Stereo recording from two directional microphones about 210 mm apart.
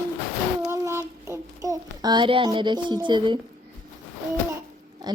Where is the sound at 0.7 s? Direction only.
10° right (ahead or behind).